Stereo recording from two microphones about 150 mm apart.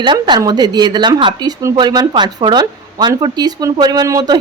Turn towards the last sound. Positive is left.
turn(degrees=-25)  # may be behind; listen again after turning